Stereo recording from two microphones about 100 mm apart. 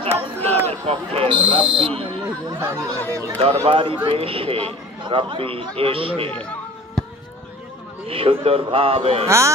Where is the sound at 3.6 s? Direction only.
60° right (ahead or behind).